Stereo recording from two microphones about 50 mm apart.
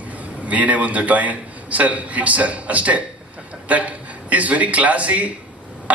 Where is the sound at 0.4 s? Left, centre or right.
Right.